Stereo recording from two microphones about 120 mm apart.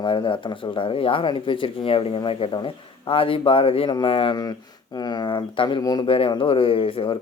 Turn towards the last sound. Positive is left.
turn(degrees=50)  # may be behind; listen again after turning